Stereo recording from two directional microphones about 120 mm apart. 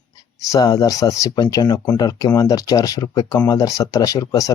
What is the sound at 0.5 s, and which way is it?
Speech, 30° left (ahead or behind).